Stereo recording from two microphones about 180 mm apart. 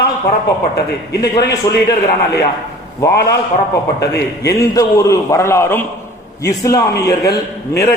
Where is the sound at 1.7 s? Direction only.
20° left (ahead or behind).